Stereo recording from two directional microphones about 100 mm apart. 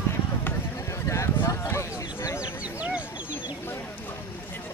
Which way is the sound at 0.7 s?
30° left (ahead or behind).